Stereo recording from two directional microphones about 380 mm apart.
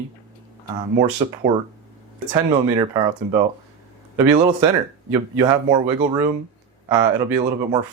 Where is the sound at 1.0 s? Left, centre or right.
Centre.